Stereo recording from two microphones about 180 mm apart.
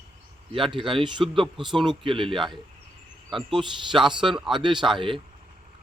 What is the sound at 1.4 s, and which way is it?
Speech, centre (ahead or behind).